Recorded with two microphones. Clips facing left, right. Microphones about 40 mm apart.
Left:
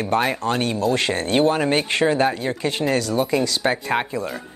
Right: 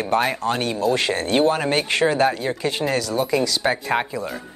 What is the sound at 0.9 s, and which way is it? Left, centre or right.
Speech, left.